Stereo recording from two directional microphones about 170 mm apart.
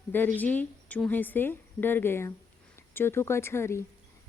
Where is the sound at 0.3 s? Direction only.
10° left (ahead or behind).